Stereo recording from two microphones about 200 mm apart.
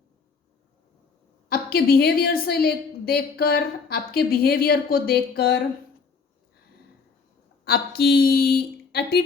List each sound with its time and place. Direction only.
1.5 s a woman's voice: 50° left (ahead or behind)
7.6 s a woman's voice: 50° left (ahead or behind)